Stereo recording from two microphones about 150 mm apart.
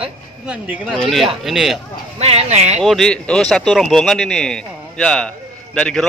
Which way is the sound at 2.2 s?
45° right (ahead or behind).